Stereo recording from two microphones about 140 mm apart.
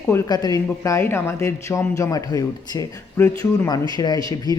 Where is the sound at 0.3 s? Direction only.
30° left (ahead or behind).